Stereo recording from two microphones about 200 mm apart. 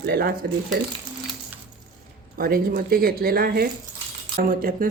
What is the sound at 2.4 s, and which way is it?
Speech, 45° right (ahead or behind).